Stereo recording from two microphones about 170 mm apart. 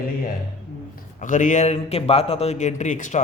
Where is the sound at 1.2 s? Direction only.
50° left (ahead or behind).